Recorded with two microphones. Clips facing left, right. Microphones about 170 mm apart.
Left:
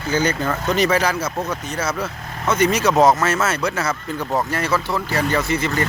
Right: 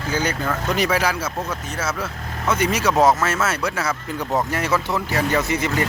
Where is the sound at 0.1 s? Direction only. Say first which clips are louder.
Left 3 dB; 10° right (ahead or behind).